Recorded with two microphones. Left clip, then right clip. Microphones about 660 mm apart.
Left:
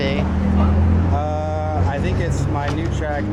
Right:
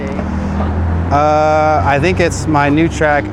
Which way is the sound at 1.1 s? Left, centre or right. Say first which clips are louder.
Right 16 dB; right.